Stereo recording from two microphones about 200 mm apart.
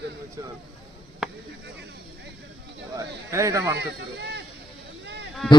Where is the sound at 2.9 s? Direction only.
15° right (ahead or behind).